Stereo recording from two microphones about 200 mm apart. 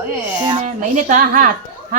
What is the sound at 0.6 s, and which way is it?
Speech, 40° right (ahead or behind).